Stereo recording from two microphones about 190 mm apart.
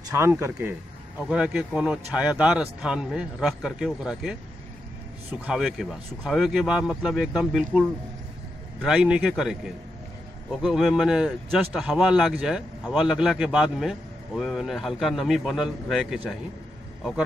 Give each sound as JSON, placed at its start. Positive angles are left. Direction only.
{"t": 0.1, "sound": "speech", "side_deg": -15}
{"t": 5.5, "sound": "speech", "side_deg": 0}
{"t": 10.6, "sound": "speech", "side_deg": 0}